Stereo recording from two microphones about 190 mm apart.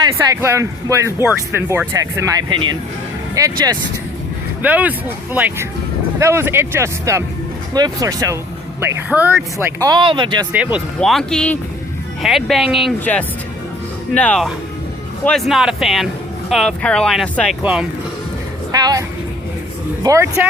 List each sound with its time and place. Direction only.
0.0 s speech: 15° right (ahead or behind)
4.6 s speech: 10° right (ahead or behind)
9.8 s speech: 25° right (ahead or behind)
10.5 s speech: 5° right (ahead or behind)
18.7 s a woman's voice: 20° right (ahead or behind)